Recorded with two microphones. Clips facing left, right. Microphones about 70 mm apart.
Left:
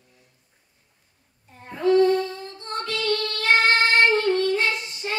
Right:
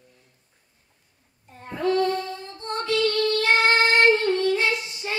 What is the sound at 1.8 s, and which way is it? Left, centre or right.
Music, left.